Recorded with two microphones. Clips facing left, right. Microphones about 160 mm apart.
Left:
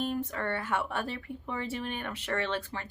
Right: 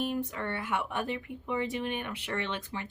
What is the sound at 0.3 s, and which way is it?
Speech, 15° right (ahead or behind).